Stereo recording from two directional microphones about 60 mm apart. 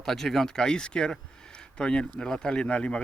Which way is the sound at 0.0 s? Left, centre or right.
Centre.